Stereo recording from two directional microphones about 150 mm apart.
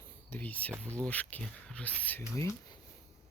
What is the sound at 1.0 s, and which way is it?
Speech, 10° left (ahead or behind).